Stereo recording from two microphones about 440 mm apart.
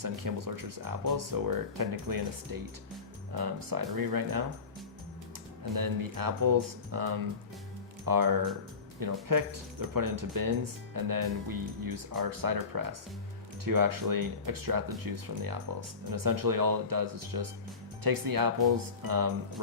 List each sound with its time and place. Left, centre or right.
0.0 s speech: right
3.3 s speech: right
5.7 s speech: right